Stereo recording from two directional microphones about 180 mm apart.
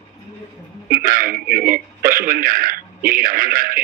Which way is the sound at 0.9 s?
55° right (ahead or behind).